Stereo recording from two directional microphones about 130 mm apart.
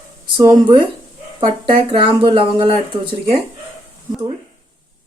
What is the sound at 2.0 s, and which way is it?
Speech, 40° right (ahead or behind).